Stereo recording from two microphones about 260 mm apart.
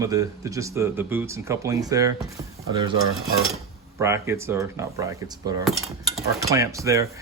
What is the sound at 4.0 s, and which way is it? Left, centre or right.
Speech, centre.